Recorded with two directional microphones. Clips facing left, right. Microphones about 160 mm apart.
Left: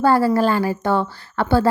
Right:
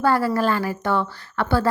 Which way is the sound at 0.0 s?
30° left (ahead or behind).